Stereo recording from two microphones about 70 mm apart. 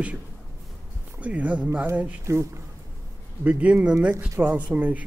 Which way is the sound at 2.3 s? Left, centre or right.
Right.